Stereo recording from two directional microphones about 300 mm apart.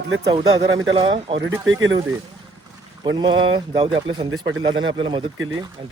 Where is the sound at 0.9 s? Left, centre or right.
Centre.